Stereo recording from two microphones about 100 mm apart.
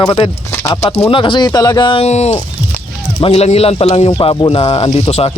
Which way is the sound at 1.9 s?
90° left.